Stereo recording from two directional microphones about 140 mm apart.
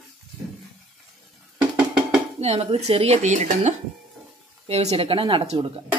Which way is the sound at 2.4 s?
50° right (ahead or behind).